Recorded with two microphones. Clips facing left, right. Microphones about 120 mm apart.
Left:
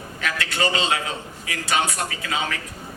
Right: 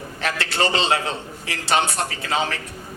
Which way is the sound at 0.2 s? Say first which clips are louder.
Right 2 dB; 30° right (ahead or behind).